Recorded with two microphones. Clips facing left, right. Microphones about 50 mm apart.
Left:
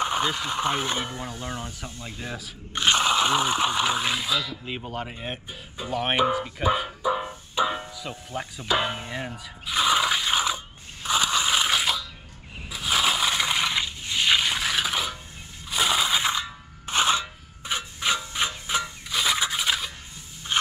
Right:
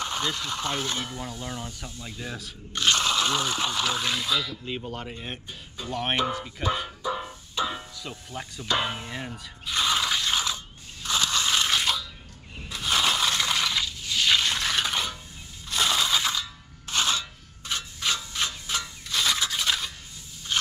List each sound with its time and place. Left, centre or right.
0.0 s speech: centre
4.6 s music: centre
12.5 s crushing: centre
15.7 s crunch: centre